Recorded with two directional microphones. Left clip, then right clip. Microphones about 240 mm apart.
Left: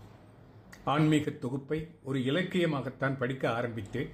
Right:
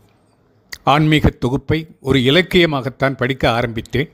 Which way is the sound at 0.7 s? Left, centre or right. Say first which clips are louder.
Right 14 dB; right.